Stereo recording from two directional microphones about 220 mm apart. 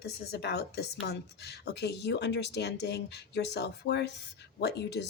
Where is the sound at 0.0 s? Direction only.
50° left (ahead or behind).